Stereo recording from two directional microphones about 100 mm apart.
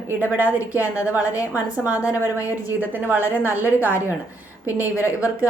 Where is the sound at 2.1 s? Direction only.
30° left (ahead or behind).